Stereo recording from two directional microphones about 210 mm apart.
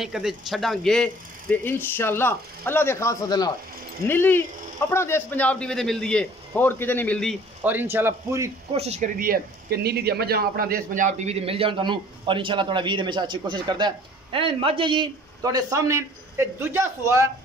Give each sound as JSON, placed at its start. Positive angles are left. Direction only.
{"t": 0.0, "sound": "speech", "side_deg": 0}
{"t": 7.6, "sound": "a man's voice", "side_deg": -10}
{"t": 8.7, "sound": "speech", "side_deg": -30}